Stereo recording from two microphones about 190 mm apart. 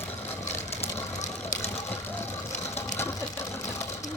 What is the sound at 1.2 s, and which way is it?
Vehicle, 40° left (ahead or behind).